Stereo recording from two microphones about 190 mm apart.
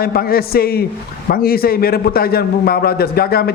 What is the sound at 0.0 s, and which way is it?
A man's voice, 50° left (ahead or behind).